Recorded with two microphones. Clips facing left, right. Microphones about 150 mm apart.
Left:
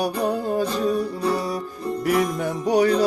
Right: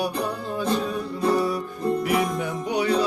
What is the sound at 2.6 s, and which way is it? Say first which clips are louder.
Music: left 5 dB; 40° left (ahead or behind).